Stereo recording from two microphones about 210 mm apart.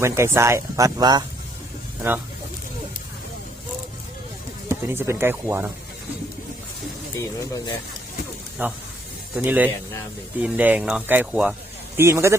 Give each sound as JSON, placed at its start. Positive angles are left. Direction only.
{"t": 0.0, "sound": "speech", "side_deg": -15}
{"t": 4.7, "sound": "speech", "side_deg": -10}
{"t": 7.2, "sound": "speech", "side_deg": 20}
{"t": 8.6, "sound": "speech", "side_deg": -10}